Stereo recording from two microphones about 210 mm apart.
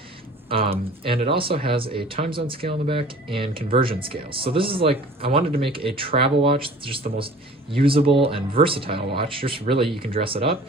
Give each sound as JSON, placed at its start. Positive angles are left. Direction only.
{"t": 0.4, "sound": "speech", "side_deg": -25}